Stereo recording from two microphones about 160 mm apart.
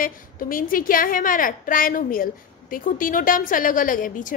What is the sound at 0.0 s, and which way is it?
A woman's voice, 60° left (ahead or behind).